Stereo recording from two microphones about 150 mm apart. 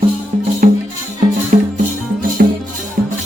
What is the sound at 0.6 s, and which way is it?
Music, 65° right (ahead or behind).